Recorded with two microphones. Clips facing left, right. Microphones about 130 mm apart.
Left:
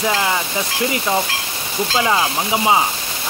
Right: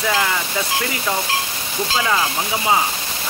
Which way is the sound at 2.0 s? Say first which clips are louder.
Left 2 dB; 20° left (ahead or behind).